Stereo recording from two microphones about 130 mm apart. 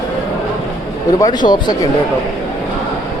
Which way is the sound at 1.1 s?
30° left (ahead or behind).